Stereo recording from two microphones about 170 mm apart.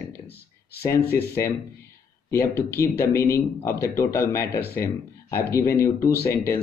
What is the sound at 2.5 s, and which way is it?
Speech, 15° left (ahead or behind).